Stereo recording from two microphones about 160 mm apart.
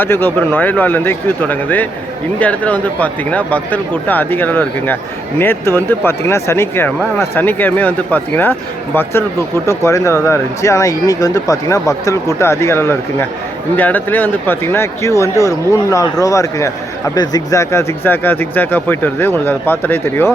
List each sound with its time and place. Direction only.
0.0 s speech: 15° left (ahead or behind)
9.6 s speech: 20° left (ahead or behind)